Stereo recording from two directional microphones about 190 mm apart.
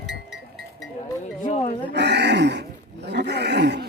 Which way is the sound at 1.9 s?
65° right (ahead or behind).